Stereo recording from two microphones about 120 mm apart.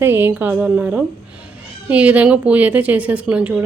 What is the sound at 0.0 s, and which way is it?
Speech, 20° right (ahead or behind).